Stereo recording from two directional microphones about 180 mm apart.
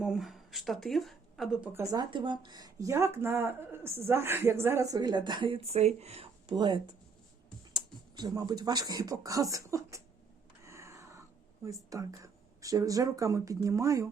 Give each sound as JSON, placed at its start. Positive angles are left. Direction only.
{"t": 0.0, "sound": "speech", "side_deg": 0}
{"t": 1.8, "sound": "speech", "side_deg": -20}
{"t": 10.6, "sound": "a sound", "side_deg": -15}
{"t": 11.6, "sound": "speech", "side_deg": -20}